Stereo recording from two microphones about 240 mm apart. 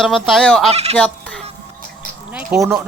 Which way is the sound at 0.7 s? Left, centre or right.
Right.